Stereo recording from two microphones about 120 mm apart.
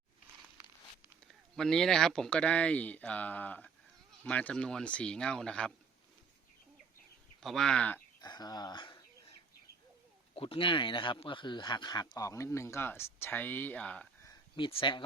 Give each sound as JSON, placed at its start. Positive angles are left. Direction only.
{"t": 1.5, "sound": "speech", "side_deg": 5}
{"t": 7.4, "sound": "speech", "side_deg": 5}
{"t": 8.2, "sound": "speech", "side_deg": 35}
{"t": 10.3, "sound": "speech", "side_deg": 50}
{"t": 14.5, "sound": "speech", "side_deg": 45}